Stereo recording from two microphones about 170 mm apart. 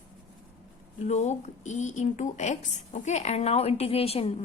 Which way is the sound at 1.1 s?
40° left (ahead or behind).